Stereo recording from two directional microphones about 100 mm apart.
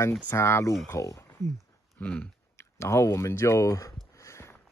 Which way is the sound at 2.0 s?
15° left (ahead or behind).